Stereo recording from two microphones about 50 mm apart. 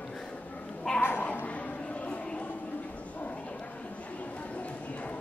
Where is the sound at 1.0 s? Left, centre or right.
Left.